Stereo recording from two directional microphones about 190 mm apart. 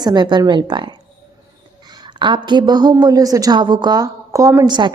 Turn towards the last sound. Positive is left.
turn(degrees=-25)  # may be behind; listen again after turning